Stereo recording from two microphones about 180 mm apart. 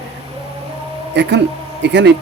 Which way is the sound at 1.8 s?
75° right (ahead or behind).